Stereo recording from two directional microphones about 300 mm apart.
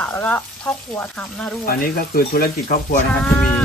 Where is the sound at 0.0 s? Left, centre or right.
Centre.